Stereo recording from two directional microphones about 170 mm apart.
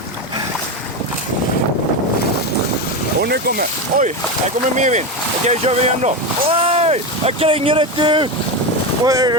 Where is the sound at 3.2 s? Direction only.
70° right (ahead or behind).